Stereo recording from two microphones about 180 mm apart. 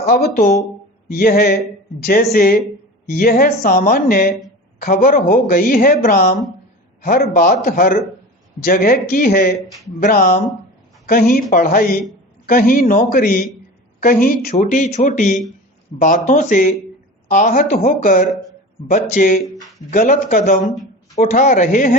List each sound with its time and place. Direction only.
0.0 s a woman's voice: 60° left (ahead or behind)